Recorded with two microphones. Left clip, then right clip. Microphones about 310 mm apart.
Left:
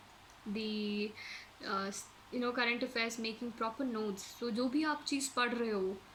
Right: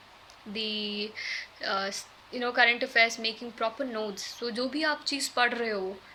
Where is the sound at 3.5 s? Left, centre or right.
Right.